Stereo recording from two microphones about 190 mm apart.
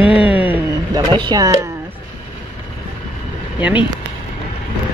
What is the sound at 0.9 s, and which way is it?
Speech, 25° right (ahead or behind).